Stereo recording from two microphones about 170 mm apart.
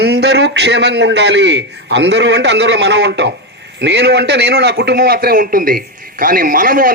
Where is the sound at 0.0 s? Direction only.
75° right (ahead or behind).